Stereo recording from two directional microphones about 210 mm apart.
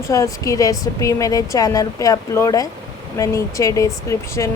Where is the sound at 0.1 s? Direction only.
15° left (ahead or behind).